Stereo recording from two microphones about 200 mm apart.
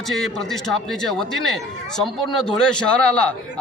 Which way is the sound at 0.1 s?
Centre (ahead or behind).